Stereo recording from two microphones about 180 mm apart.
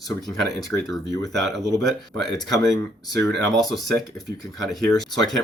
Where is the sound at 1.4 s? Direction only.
Centre (ahead or behind).